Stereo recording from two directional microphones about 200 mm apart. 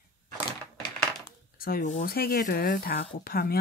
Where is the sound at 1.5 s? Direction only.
45° left (ahead or behind).